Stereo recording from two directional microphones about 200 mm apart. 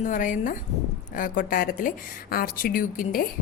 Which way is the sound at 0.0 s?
40° left (ahead or behind).